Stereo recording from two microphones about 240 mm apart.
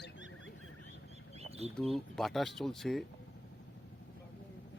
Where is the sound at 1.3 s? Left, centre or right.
Right.